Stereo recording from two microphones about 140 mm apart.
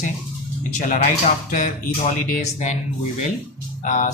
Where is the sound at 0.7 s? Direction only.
60° left (ahead or behind).